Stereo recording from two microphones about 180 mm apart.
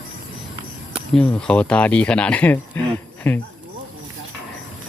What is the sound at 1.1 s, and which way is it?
Speech, 5° left (ahead or behind).